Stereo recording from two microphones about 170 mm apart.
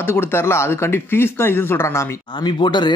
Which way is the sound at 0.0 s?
15° left (ahead or behind).